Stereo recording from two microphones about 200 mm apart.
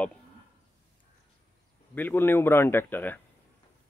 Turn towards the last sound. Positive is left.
turn(degrees=10)  # may be behind; listen again after turning